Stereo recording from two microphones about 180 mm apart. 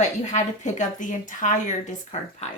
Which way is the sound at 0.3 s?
40° left (ahead or behind).